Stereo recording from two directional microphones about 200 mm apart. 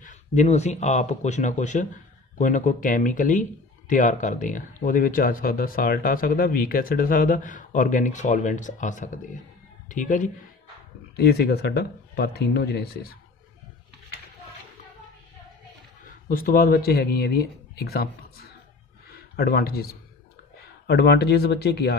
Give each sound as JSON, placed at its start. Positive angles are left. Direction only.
{"t": 0.0, "sound": "a man's voice", "side_deg": 40}
{"t": 11.1, "sound": "speech", "side_deg": 50}
{"t": 16.3, "sound": "speech", "side_deg": 45}
{"t": 19.1, "sound": "speech", "side_deg": 50}